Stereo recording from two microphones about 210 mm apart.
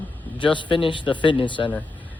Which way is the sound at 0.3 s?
25° left (ahead or behind).